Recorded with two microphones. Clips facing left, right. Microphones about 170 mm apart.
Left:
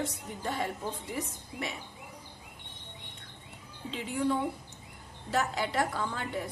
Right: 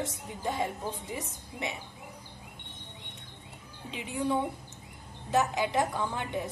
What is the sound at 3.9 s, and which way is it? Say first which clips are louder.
A woman's voice: even; 15° right (ahead or behind).